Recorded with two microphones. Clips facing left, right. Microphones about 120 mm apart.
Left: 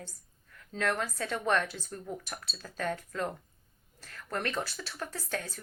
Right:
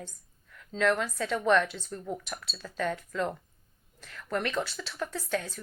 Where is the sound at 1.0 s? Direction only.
45° left (ahead or behind).